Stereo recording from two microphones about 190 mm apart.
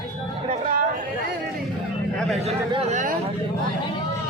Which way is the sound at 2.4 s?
35° right (ahead or behind).